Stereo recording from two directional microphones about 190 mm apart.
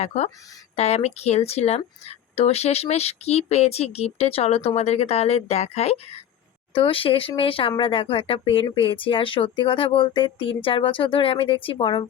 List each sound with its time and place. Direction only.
0.0 s speech: 35° left (ahead or behind)